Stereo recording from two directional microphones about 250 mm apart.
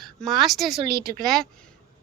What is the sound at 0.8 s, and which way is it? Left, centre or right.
Speech, right.